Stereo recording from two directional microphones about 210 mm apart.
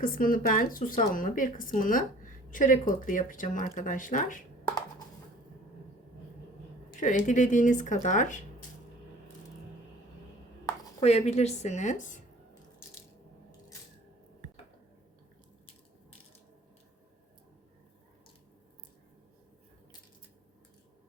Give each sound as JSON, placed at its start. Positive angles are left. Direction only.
{"t": 0.0, "sound": "speech", "side_deg": 40}
{"t": 6.9, "sound": "speech", "side_deg": 35}
{"t": 11.0, "sound": "speech", "side_deg": 30}